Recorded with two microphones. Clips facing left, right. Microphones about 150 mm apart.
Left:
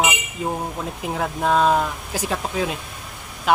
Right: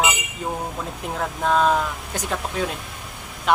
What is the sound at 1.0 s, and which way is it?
Speech, 5° left (ahead or behind).